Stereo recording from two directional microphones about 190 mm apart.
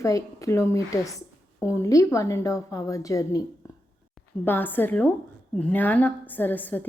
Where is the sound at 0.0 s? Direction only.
15° left (ahead or behind).